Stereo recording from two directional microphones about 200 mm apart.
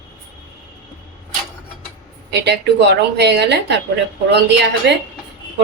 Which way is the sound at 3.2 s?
55° right (ahead or behind).